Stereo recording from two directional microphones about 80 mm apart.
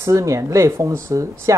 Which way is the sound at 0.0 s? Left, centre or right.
Right.